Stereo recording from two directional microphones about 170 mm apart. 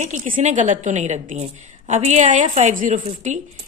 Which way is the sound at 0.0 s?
45° right (ahead or behind).